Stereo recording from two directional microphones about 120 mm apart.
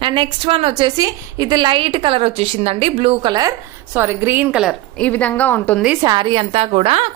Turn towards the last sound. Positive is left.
turn(degrees=-50)  # may be behind; listen again after turning